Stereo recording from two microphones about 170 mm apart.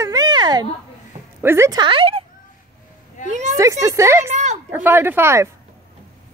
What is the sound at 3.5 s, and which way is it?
Speech, 20° right (ahead or behind).